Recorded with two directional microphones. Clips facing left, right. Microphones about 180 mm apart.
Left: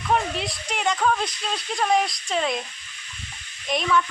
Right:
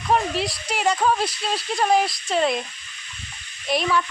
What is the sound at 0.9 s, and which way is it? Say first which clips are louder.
Speech: right 2 dB; 30° right (ahead or behind).